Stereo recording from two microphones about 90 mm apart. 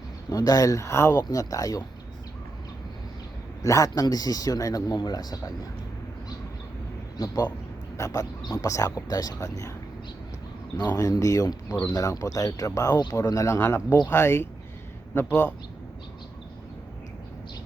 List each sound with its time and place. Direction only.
0.3 s speech: 40° left (ahead or behind)
3.6 s speech: 40° left (ahead or behind)
7.9 s speech: 40° left (ahead or behind)
10.8 s speech: 45° left (ahead or behind); by 14.4 s 25° left (ahead or behind)